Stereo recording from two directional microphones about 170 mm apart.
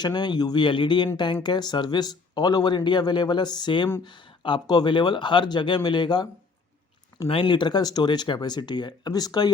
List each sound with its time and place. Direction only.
0.0 s speech: 25° left (ahead or behind)
7.3 s speech: 30° left (ahead or behind)